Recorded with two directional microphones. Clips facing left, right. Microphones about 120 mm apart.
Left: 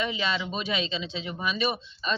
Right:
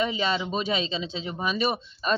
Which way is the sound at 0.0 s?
40° right (ahead or behind).